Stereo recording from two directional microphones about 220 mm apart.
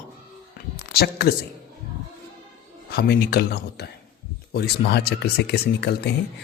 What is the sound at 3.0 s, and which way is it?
Speech, 45° left (ahead or behind).